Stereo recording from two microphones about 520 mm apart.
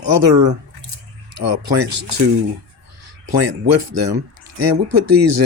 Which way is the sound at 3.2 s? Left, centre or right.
Right.